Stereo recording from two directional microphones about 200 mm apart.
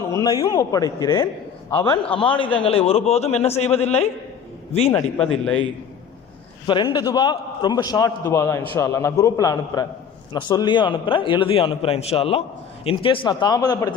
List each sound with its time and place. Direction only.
0.1 s a man's voice: 15° left (ahead or behind); by 4.1 s 30° left (ahead or behind)
4.9 s speech: 10° left (ahead or behind)
6.7 s a man's voice: 20° left (ahead or behind)